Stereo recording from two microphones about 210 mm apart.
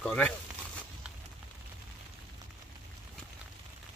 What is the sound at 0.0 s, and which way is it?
Speech, 5° left (ahead or behind).